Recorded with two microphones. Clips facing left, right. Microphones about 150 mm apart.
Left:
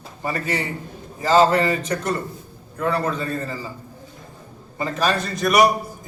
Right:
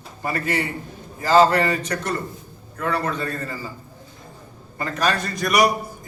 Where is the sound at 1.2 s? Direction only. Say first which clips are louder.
Even; centre (ahead or behind).